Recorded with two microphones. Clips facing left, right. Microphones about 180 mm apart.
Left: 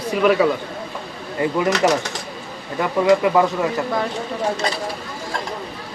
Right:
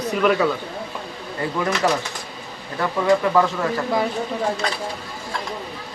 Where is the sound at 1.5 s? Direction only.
15° left (ahead or behind).